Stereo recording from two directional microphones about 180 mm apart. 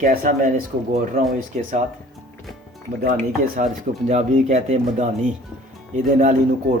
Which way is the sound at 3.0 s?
50° right (ahead or behind).